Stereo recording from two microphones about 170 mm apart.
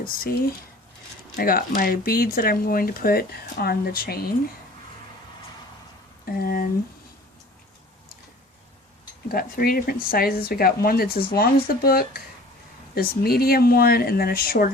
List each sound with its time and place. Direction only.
0.0 s speech: 55° left (ahead or behind)
1.4 s speech: 55° left (ahead or behind)
6.2 s speech: 60° left (ahead or behind)
9.3 s speech: 60° left (ahead or behind)